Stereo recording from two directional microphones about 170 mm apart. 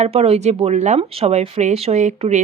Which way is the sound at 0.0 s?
35° right (ahead or behind).